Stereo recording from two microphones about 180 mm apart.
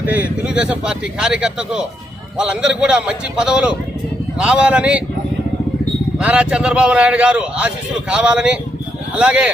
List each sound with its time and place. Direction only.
0.0 s speech: 10° right (ahead or behind)
6.1 s speech: 5° right (ahead or behind)